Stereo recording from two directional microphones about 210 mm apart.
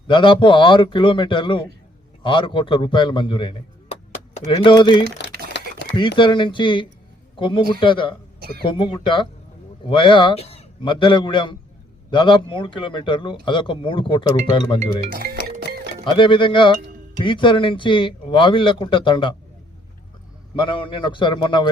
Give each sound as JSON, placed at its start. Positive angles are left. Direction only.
{"t": 0.1, "sound": "a man's voice", "side_deg": 25}
{"t": 5.5, "sound": "a sound", "side_deg": 55}
{"t": 6.0, "sound": "a man's voice", "side_deg": 25}
{"t": 8.4, "sound": "a sound", "side_deg": -45}
{"t": 8.6, "sound": "a man's voice", "side_deg": 25}
{"t": 15.1, "sound": "speech", "side_deg": -45}
{"t": 15.4, "sound": "music", "side_deg": -45}
{"t": 16.1, "sound": "a man's voice", "side_deg": 25}
{"t": 20.6, "sound": "a man's voice", "side_deg": 25}